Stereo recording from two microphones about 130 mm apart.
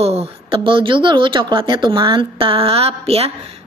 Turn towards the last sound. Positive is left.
turn(degrees=-50)  # may be behind; listen again after turning